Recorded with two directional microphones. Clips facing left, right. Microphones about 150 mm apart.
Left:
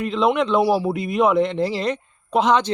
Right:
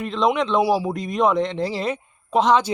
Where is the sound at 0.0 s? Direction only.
Centre (ahead or behind).